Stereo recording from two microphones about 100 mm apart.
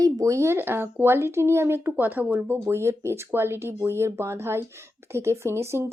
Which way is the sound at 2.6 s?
30° right (ahead or behind).